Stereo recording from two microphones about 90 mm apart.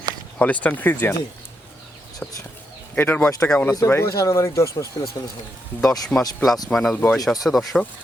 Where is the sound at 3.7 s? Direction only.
35° left (ahead or behind).